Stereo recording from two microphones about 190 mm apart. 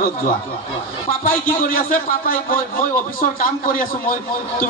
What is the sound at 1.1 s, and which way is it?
A man's voice, 45° left (ahead or behind).